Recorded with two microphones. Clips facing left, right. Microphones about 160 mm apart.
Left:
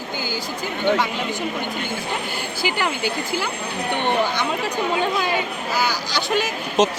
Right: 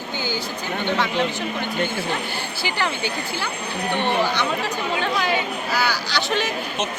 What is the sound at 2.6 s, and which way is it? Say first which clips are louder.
Speech: left 2 dB; 10° left (ahead or behind).